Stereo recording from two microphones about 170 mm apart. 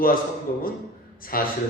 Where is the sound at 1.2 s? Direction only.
55° left (ahead or behind).